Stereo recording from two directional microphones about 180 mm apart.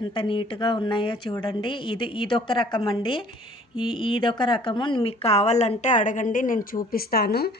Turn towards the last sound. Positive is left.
turn(degrees=60)  # may be behind; listen again after turning